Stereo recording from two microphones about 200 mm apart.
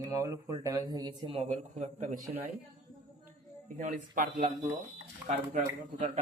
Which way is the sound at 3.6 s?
40° right (ahead or behind).